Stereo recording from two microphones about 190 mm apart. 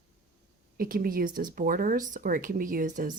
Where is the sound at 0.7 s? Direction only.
50° right (ahead or behind).